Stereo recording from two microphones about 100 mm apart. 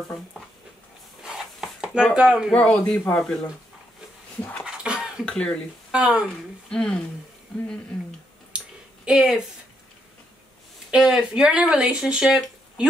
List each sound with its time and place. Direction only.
1.2 s chopping: 5° right (ahead or behind)
2.1 s speech: 10° right (ahead or behind)
2.5 s speech: 10° left (ahead or behind)
4.4 s a sound: 15° left (ahead or behind)
4.6 s cough: 10° right (ahead or behind)
5.2 s speech: 10° left (ahead or behind)
5.9 s speech: 10° right (ahead or behind)
6.2 s speech: 5° left (ahead or behind)
8.5 s a sound: 10° right (ahead or behind)
10.9 s speech: 5° right (ahead or behind)